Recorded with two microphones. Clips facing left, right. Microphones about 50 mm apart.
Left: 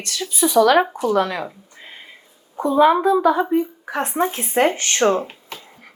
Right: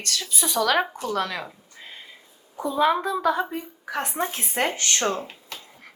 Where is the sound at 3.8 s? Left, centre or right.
Left.